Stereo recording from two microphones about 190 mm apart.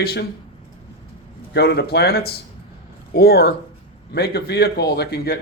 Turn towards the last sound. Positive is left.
turn(degrees=60)  # may be behind; listen again after turning